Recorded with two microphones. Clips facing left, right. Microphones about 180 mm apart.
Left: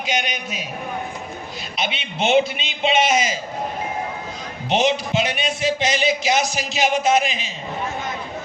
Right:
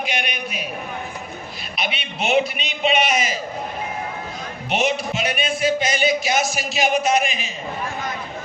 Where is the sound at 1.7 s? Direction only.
25° left (ahead or behind).